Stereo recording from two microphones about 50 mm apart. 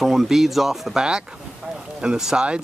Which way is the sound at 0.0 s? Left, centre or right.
Centre.